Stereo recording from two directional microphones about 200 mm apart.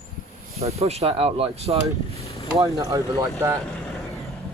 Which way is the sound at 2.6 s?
15° right (ahead or behind).